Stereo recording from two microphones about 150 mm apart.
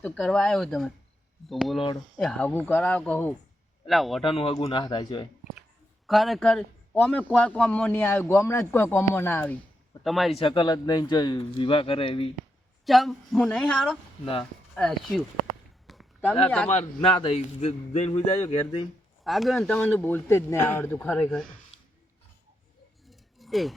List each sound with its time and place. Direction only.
0.0 s a man's voice: 5° left (ahead or behind)
3.8 s speech: centre (ahead or behind)
4.2 s speech: 40° left (ahead or behind)
6.1 s a man's voice: centre (ahead or behind)
10.0 s speech: centre (ahead or behind)
10.3 s speech: 35° left (ahead or behind)
12.8 s speech: centre (ahead or behind)
15.9 s a sound: centre (ahead or behind)
16.6 s a man's voice: 45° left (ahead or behind)
19.2 s a man's voice: centre (ahead or behind)
23.0 s a sound: centre (ahead or behind)